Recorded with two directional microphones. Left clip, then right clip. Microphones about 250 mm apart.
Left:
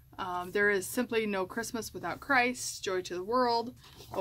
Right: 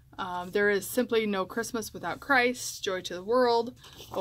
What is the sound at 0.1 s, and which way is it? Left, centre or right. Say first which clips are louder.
A woman's voice: right 2 dB; centre.